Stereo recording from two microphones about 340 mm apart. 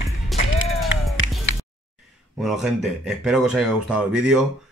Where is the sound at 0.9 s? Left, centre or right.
Left.